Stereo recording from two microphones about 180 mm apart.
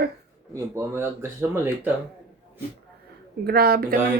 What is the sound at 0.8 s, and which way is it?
Speech, 15° right (ahead or behind).